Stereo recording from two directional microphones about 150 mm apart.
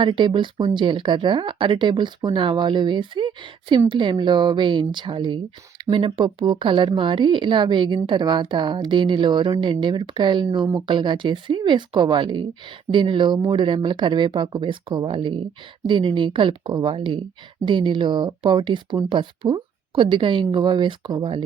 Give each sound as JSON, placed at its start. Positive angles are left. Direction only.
{"t": 0.0, "sound": "a woman's voice", "side_deg": -30}